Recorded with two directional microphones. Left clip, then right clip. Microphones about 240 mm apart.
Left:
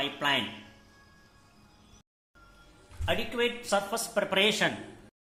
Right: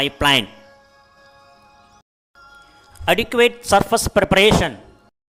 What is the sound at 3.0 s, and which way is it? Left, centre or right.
A man's voice, right.